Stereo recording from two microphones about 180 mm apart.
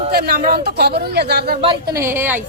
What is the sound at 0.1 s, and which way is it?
Speech, 60° right (ahead or behind).